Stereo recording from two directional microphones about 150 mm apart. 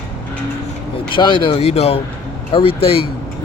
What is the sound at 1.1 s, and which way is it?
Speech, 35° left (ahead or behind).